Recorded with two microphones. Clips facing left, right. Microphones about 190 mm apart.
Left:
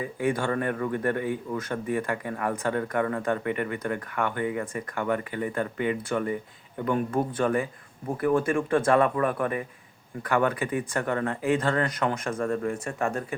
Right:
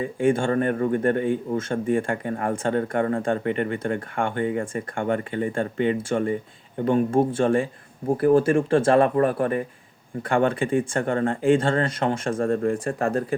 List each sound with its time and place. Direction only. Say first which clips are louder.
0.0 s a man's voice: right 5 dB; 25° right (ahead or behind)